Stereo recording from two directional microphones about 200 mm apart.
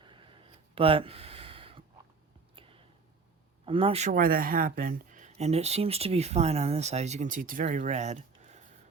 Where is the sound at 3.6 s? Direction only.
25° right (ahead or behind).